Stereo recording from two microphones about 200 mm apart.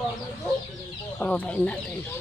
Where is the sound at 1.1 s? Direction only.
5° left (ahead or behind).